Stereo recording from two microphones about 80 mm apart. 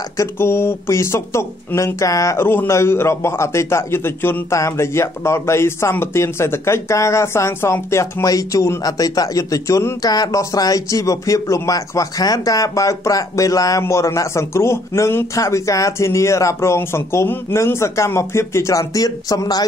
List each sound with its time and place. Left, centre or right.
0.2 s speech: left
2.4 s a man's voice: left
10.0 s speech: left